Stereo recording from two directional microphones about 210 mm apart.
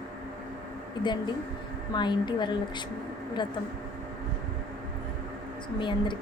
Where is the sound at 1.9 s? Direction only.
20° left (ahead or behind).